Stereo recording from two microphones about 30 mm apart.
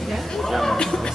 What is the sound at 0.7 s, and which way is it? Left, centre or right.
Chatter, left.